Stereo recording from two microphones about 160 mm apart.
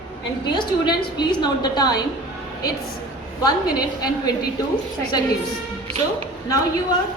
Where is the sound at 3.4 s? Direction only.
25° left (ahead or behind).